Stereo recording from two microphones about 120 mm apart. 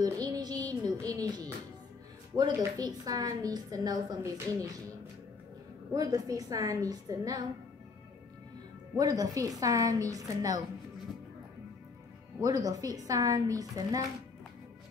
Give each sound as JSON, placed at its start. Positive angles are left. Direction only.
{"t": 0.0, "sound": "music", "side_deg": -30}
{"t": 2.3, "sound": "a woman's voice", "side_deg": -35}
{"t": 5.9, "sound": "a woman's voice", "side_deg": -30}
{"t": 8.9, "sound": "a woman's voice", "side_deg": -35}
{"t": 12.4, "sound": "a woman's voice", "side_deg": -30}